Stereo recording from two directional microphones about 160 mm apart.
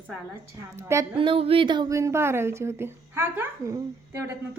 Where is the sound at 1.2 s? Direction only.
35° right (ahead or behind).